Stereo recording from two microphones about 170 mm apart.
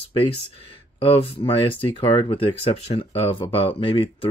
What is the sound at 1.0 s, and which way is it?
Speech, 35° left (ahead or behind).